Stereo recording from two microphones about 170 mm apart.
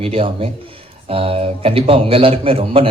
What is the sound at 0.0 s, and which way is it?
Speech, 35° right (ahead or behind).